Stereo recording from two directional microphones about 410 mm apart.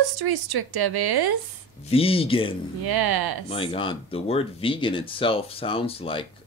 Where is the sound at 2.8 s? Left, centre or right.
Right.